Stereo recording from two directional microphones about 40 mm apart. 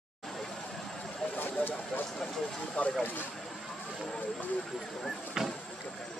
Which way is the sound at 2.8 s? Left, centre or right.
Left.